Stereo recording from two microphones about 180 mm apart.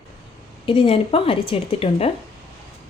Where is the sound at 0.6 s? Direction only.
30° left (ahead or behind).